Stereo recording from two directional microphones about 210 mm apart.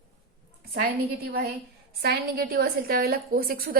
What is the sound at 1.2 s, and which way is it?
A woman's voice, 45° right (ahead or behind).